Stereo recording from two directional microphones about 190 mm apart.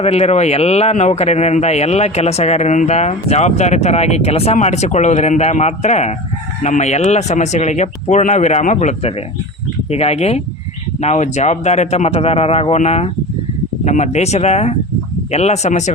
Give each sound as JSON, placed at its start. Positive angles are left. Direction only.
{"t": 0.0, "sound": "speech", "side_deg": 35}